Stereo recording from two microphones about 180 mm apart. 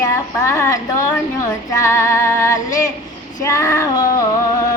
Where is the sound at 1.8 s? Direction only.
15° left (ahead or behind).